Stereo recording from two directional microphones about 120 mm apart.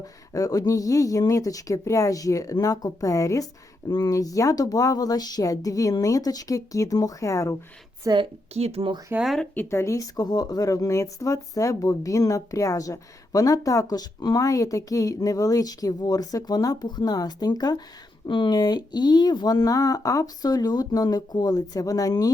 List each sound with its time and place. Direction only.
0.0 s speech: 30° left (ahead or behind)
8.1 s a woman's voice: 30° right (ahead or behind)
8.5 s speech: 60° right (ahead or behind)
9.1 s speech: centre (ahead or behind)
9.6 s speech: 20° left (ahead or behind)